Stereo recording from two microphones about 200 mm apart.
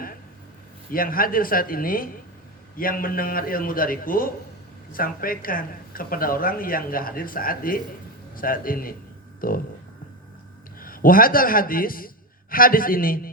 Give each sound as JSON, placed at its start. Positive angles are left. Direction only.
{"t": 0.9, "sound": "speech", "side_deg": 45}
{"t": 10.8, "sound": "a man's voice", "side_deg": 45}